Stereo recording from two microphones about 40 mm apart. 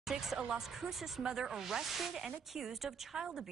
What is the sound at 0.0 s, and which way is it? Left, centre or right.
Speech, centre.